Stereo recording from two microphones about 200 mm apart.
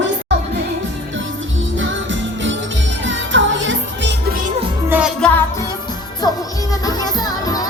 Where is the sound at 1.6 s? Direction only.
70° right (ahead or behind).